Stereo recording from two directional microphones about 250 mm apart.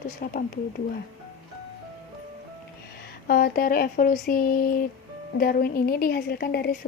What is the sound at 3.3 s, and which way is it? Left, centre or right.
Speech, left.